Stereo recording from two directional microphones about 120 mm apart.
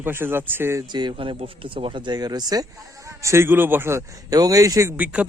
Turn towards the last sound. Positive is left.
turn(degrees=-10)  # may be behind; listen again after turning